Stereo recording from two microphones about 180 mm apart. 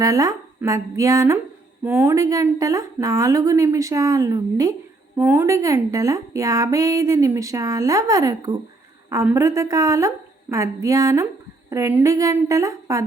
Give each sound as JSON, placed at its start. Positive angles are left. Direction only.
{"t": 0.0, "sound": "speech", "side_deg": -20}